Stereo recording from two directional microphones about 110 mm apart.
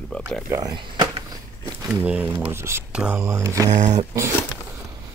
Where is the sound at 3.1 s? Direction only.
25° right (ahead or behind).